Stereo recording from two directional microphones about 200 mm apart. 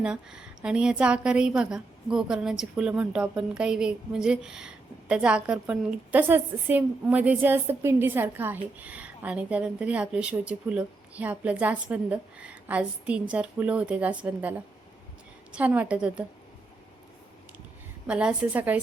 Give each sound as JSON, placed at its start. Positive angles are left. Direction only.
{"t": 0.0, "sound": "a woman's voice", "side_deg": -5}
{"t": 15.5, "sound": "a woman's voice", "side_deg": -10}
{"t": 18.0, "sound": "a woman's voice", "side_deg": -5}